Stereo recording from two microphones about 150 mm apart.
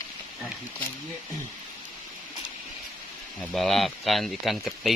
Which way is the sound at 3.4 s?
Centre (ahead or behind).